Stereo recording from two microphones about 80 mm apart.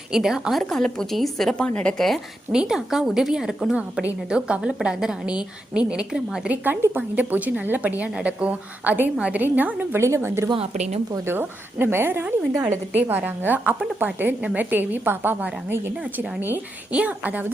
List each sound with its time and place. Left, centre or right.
0.1 s a woman's voice: centre
0.6 s a woman's voice: centre
2.0 s a woman's voice: centre
2.5 s a woman's voice: centre
6.9 s a woman's voice: right
10.0 s a woman's voice: right